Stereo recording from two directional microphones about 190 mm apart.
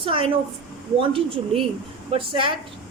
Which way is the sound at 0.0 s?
30° right (ahead or behind).